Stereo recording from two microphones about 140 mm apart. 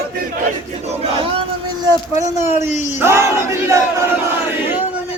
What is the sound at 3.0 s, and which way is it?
Battle cry, 20° right (ahead or behind).